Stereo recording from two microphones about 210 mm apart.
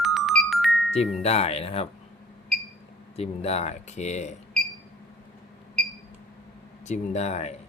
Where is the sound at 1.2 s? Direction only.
30° left (ahead or behind).